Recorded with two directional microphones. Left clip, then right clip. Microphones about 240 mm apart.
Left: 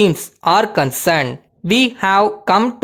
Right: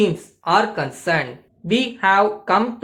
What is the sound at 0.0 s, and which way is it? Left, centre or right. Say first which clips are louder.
Speech: left 6 dB; left.